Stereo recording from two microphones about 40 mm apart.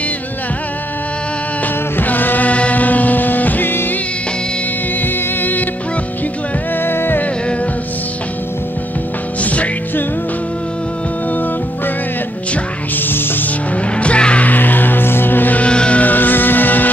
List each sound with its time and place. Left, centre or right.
2.0 s music: left
5.0 s music: left
6.8 s music: left
9.4 s music: left
12.9 s music: left
13.9 s music: left
14.5 s music: left
15.5 s music: left
16.0 s music: left